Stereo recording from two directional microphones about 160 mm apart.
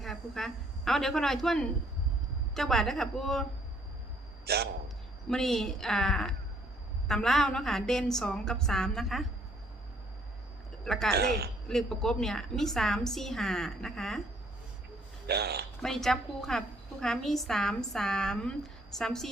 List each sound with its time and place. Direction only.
0.0 s a woman's voice: centre (ahead or behind)
4.4 s a man's voice: 80° right
5.3 s a woman's voice: centre (ahead or behind)
10.8 s a woman's voice: 5° left (ahead or behind)
11.1 s speech: 80° right
11.7 s a woman's voice: 5° left (ahead or behind)
15.3 s speech: 85° right
15.8 s a woman's voice: centre (ahead or behind)